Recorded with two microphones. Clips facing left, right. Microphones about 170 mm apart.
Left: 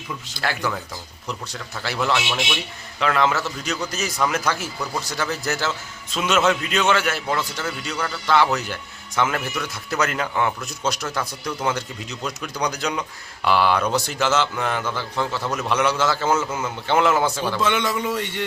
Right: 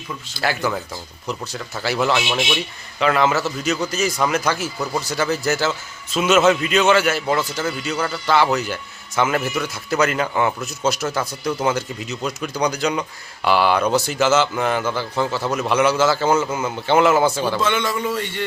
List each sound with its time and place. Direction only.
0.3 s a man's voice: 5° right (ahead or behind)
17.6 s speech: 15° left (ahead or behind)